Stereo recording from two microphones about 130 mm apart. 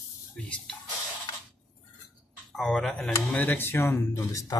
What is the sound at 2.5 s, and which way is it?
Speech, 5° left (ahead or behind).